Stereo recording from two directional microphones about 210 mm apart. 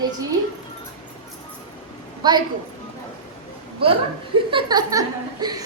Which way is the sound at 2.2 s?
20° right (ahead or behind).